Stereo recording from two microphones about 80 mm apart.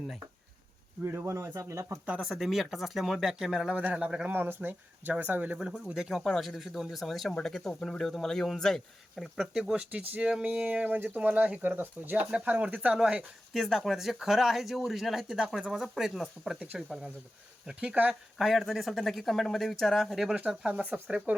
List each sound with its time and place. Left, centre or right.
1.0 s speech: right
2.0 s speech: centre
4.3 s speech: right
5.5 s speech: centre
13.5 s speech: centre
16.6 s speech: centre
18.1 s speech: centre
20.8 s speech: centre